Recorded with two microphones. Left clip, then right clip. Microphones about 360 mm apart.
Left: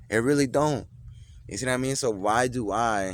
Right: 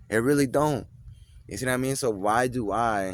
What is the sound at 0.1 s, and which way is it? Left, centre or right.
Speech, right.